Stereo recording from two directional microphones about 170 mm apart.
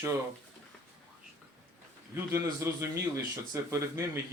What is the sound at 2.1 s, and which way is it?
A man's voice, 15° right (ahead or behind).